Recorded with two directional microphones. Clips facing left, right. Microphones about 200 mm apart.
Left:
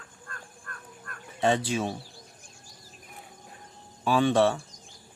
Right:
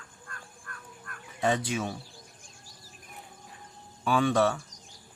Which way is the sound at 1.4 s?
30° left (ahead or behind).